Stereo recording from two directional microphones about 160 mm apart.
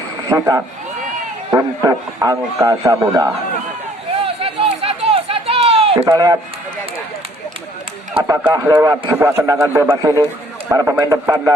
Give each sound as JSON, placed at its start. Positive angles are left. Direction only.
{"t": 0.3, "sound": "a man's voice", "side_deg": -20}
{"t": 4.4, "sound": "a sound", "side_deg": -40}
{"t": 6.1, "sound": "a man's voice", "side_deg": -20}
{"t": 8.3, "sound": "a man's voice", "side_deg": -15}